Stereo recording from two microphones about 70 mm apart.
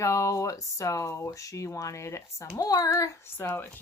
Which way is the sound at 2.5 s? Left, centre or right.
Left.